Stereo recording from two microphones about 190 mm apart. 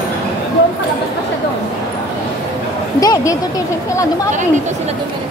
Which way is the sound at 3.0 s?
20° left (ahead or behind).